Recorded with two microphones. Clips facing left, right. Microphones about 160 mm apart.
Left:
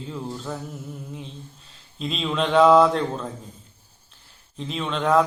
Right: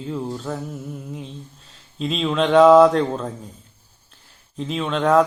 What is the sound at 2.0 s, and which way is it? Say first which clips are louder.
Speech: right 4 dB; centre (ahead or behind).